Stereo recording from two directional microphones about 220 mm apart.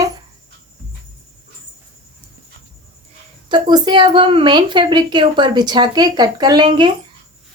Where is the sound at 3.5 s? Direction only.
20° right (ahead or behind).